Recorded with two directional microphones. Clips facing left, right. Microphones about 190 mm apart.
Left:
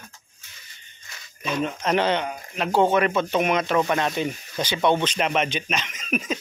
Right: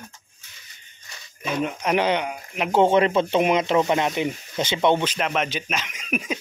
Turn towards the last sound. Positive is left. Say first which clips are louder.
# left 1 dB
turn(degrees=-10)  # may be behind; listen again after turning